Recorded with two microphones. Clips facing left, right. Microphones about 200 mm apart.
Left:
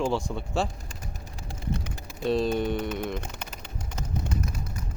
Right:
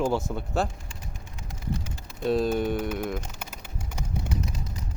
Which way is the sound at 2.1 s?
Centre (ahead or behind).